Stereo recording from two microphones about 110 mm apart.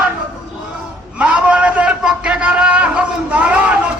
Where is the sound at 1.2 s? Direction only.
10° right (ahead or behind).